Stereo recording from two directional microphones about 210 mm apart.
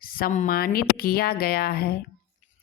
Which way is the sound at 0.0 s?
45° left (ahead or behind).